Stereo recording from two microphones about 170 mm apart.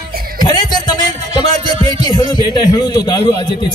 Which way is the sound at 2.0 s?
25° left (ahead or behind).